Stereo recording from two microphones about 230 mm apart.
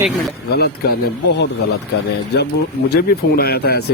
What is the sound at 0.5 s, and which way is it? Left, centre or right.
Speech, left.